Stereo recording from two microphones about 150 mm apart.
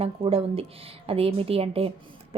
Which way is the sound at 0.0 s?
40° right (ahead or behind).